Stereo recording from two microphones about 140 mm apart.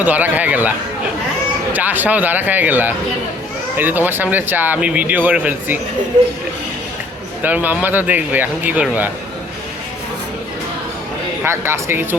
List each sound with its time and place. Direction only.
0.0 s speech: 10° right (ahead or behind)
1.7 s speech: 10° right (ahead or behind)
7.4 s speech: 10° right (ahead or behind)
11.4 s speech: 15° right (ahead or behind)